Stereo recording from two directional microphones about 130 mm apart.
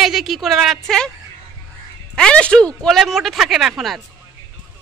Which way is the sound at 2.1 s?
5° left (ahead or behind).